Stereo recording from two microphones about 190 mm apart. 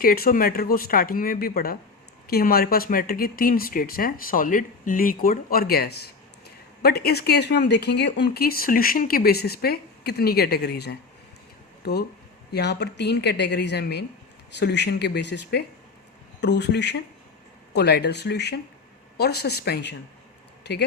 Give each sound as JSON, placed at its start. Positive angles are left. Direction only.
{"t": 0.0, "sound": "speech", "side_deg": 50}